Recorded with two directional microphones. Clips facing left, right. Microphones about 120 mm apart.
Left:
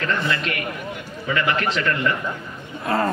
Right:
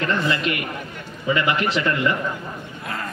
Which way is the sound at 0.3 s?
20° right (ahead or behind).